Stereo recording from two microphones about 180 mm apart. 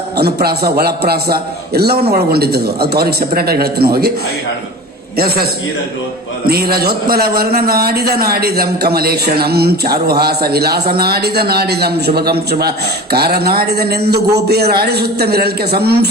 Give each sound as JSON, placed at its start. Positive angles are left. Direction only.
{"t": 0.2, "sound": "a man's voice", "side_deg": -60}
{"t": 5.1, "sound": "a man's voice", "side_deg": -60}
{"t": 6.5, "sound": "a man's voice", "side_deg": -60}